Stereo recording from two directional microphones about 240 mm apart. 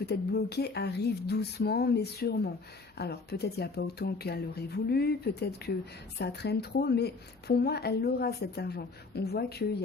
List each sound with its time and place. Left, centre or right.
0.0 s a woman's voice: left